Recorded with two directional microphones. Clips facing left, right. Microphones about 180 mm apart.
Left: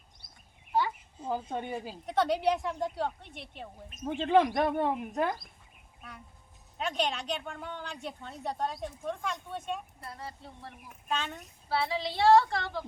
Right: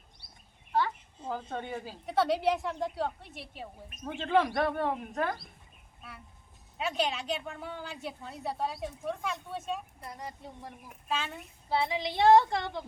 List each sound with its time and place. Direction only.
0.7 s a sound: 10° left (ahead or behind)
2.0 s a woman's voice: centre (ahead or behind)
4.0 s speech: 15° left (ahead or behind)
6.7 s a woman's voice: 5° right (ahead or behind)
10.0 s a woman's voice: 15° right (ahead or behind)
11.7 s a child's voice: 20° right (ahead or behind)